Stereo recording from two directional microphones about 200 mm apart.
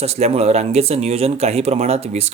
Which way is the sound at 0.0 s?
30° right (ahead or behind).